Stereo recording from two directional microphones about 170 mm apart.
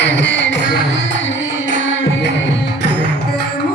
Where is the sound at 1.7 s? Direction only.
90° left.